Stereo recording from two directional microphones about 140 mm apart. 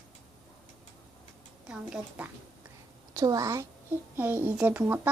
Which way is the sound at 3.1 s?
25° right (ahead or behind).